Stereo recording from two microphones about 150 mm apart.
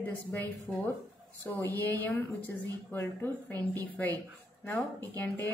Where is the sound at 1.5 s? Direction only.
20° left (ahead or behind).